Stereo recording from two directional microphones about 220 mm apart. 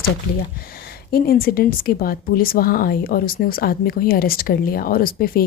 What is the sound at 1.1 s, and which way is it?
Speech, 40° left (ahead or behind).